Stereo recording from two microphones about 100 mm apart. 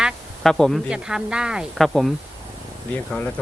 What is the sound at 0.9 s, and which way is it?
A woman's voice, 5° right (ahead or behind).